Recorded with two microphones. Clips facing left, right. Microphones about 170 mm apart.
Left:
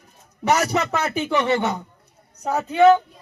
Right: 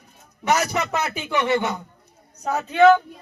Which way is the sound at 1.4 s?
30° left (ahead or behind).